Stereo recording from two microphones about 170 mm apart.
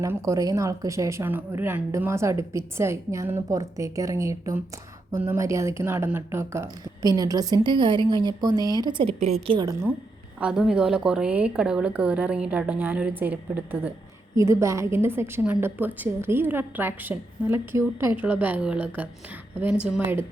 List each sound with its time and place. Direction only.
0.0 s a woman's voice: 15° right (ahead or behind)
10.4 s speech: 5° right (ahead or behind)